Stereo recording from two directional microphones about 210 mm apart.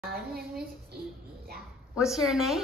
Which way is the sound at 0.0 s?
45° right (ahead or behind).